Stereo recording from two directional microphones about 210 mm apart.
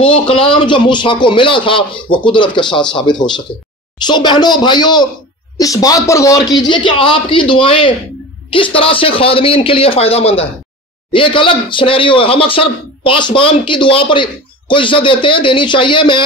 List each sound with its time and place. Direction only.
0.0 s speech: 25° left (ahead or behind)